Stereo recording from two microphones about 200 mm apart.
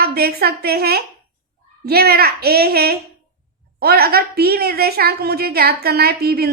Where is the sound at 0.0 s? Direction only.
50° right (ahead or behind).